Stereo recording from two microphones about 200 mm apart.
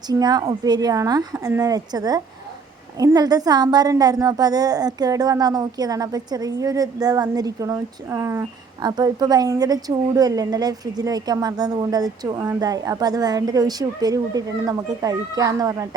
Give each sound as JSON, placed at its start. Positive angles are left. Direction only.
{"t": 0.1, "sound": "a woman's voice", "side_deg": -20}